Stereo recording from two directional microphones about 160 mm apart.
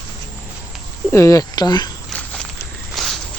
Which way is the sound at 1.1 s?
20° left (ahead or behind).